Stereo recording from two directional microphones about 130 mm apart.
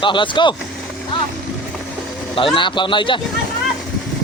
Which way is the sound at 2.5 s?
40° left (ahead or behind).